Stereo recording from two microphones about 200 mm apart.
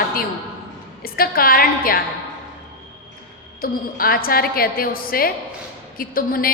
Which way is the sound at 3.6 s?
45° left (ahead or behind).